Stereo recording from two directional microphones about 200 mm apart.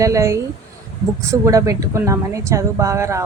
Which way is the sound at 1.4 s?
15° right (ahead or behind).